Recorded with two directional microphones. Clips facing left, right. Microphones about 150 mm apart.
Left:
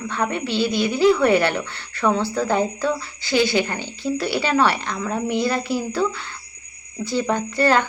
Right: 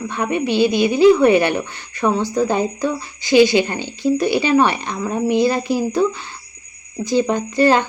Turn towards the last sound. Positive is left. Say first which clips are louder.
# right 3 dB
turn(degrees=-20)  # may be behind; listen again after turning